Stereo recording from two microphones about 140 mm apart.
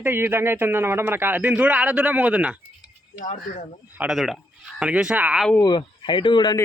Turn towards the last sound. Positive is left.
turn(degrees=35)  # may be behind; listen again after turning